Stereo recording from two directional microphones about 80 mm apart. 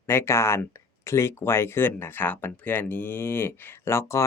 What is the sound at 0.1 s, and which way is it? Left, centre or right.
Speech, left.